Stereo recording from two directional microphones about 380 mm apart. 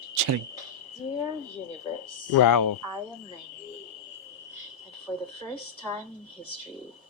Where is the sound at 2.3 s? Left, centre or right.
Left.